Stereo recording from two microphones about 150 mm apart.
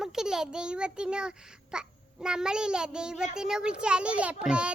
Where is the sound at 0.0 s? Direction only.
5° right (ahead or behind).